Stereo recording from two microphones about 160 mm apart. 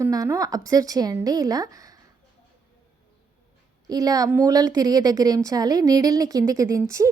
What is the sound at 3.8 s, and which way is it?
Speech, 25° right (ahead or behind).